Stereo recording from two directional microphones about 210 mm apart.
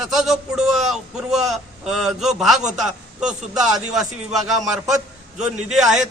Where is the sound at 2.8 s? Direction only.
Centre (ahead or behind).